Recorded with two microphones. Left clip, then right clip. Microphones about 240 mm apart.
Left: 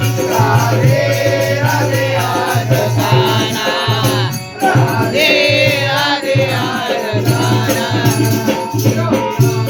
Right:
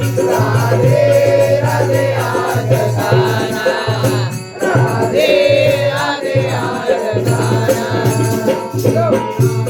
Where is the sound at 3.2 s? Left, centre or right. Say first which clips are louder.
Left 3 dB; right.